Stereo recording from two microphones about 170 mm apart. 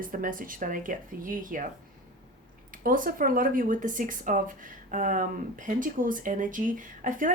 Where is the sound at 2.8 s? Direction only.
55° right (ahead or behind).